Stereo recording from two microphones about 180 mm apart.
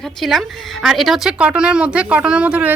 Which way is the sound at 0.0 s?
Centre (ahead or behind).